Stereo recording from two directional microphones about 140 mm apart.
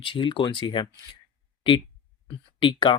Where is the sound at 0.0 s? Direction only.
35° left (ahead or behind).